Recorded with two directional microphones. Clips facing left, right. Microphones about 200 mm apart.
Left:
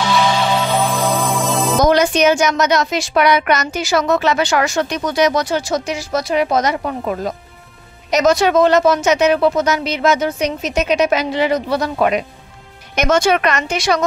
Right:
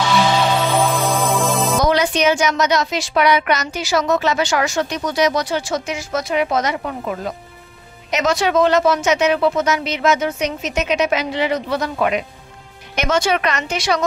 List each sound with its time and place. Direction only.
0.9 s music: centre (ahead or behind)
1.8 s a woman's voice: 45° left (ahead or behind)